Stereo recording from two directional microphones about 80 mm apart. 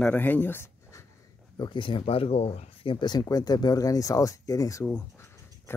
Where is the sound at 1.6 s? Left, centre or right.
Left.